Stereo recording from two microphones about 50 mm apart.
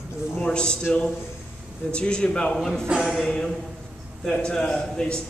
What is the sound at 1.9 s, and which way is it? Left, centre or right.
Speech, left.